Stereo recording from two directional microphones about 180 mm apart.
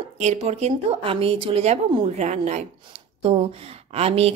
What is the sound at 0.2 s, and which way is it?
A woman's voice, 40° right (ahead or behind).